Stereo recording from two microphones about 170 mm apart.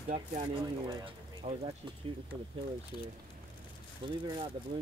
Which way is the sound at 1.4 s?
35° right (ahead or behind).